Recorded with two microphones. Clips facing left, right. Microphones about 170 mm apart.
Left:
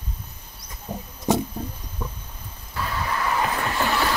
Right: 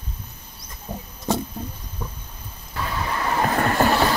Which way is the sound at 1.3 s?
15° left (ahead or behind).